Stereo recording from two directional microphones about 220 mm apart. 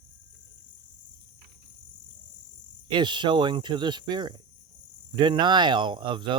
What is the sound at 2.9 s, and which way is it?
Speech, 20° right (ahead or behind).